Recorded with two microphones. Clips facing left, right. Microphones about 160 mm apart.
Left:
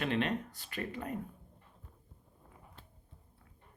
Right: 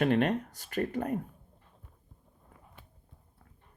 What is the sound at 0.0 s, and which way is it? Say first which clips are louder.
Speech: right 7 dB; 50° right (ahead or behind).